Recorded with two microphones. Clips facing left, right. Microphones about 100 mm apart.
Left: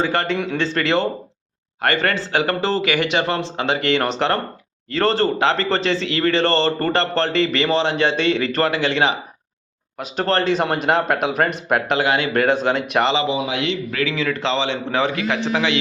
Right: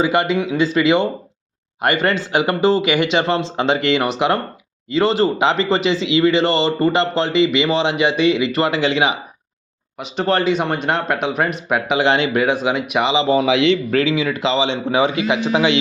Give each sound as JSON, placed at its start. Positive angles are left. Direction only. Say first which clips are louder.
{"t": 0.0, "sound": "a man's voice", "louder": "right 3 dB", "side_deg": -10}
{"t": 4.0, "sound": "a man's voice", "louder": "right 2 dB", "side_deg": -10}
{"t": 10.4, "sound": "speech", "louder": "even", "side_deg": 0}
{"t": 12.0, "sound": "speech", "louder": "right 3 dB", "side_deg": -25}
{"t": 12.3, "sound": "speech", "louder": "even", "side_deg": -5}
{"t": 13.4, "sound": "a man's voice", "louder": "right 8 dB", "side_deg": -90}
{"t": 14.1, "sound": "a man's voice", "louder": "right 3 dB", "side_deg": -10}